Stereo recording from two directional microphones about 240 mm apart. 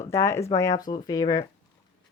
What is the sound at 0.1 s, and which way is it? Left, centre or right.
A woman's voice, centre.